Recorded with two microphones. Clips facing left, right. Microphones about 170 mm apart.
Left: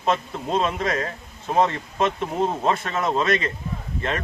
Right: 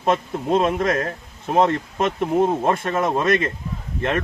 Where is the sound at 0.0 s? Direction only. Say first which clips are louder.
Right 3 dB; 55° right (ahead or behind).